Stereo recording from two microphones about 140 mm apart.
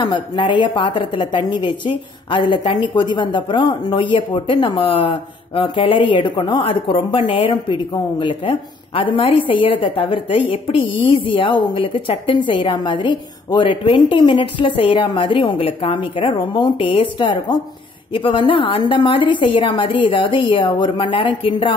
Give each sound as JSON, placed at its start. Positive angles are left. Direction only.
{"t": 0.0, "sound": "a woman's voice", "side_deg": 35}